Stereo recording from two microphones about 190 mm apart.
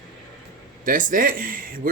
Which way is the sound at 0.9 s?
45° right (ahead or behind).